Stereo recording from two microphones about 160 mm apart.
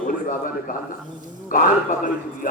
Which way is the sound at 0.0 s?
60° left (ahead or behind).